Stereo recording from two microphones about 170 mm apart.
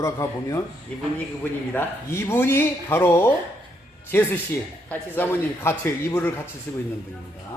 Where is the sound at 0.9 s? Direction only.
5° left (ahead or behind).